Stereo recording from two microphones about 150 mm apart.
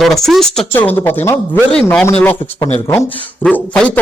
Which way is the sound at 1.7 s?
5° left (ahead or behind).